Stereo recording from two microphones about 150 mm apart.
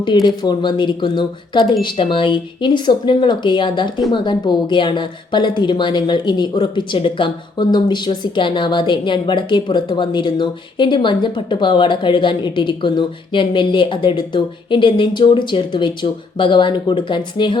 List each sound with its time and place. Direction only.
0.0 s a woman's voice: 30° left (ahead or behind)